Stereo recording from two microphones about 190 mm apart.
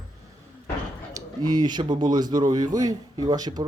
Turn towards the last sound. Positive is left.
turn(degrees=-20)  # may be behind; listen again after turning